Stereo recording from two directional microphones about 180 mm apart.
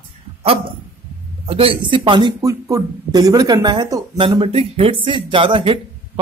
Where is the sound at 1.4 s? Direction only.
30° right (ahead or behind).